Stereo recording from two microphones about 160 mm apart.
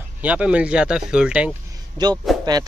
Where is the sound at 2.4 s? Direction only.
25° right (ahead or behind).